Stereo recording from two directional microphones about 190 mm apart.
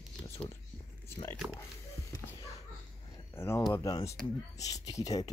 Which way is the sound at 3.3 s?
15° left (ahead or behind).